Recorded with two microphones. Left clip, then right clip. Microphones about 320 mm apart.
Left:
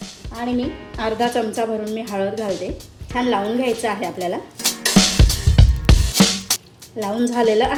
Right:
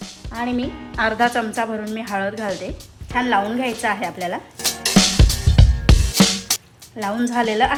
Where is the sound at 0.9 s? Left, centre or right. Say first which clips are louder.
Right 2 dB; centre.